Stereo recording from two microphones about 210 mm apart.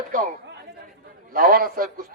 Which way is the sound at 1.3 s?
40° right (ahead or behind).